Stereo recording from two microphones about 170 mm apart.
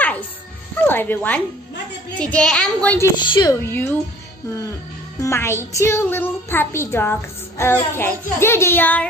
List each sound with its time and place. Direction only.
0.8 s a child's voice: 10° left (ahead or behind)
3.2 s a woman's voice: 25° left (ahead or behind)
3.5 s a child's voice: 15° left (ahead or behind)
5.2 s a child's voice: 15° left (ahead or behind)